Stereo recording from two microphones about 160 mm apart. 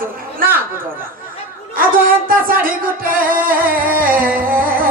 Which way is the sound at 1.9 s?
60° right (ahead or behind).